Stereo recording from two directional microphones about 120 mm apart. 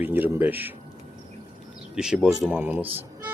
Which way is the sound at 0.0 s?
15° right (ahead or behind).